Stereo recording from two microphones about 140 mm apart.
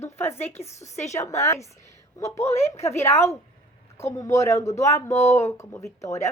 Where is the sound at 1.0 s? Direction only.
20° left (ahead or behind).